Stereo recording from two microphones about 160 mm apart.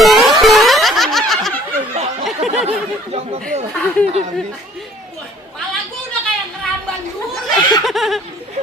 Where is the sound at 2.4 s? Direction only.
40° right (ahead or behind).